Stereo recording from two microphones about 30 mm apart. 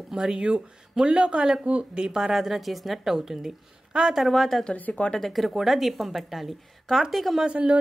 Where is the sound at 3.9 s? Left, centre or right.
Right.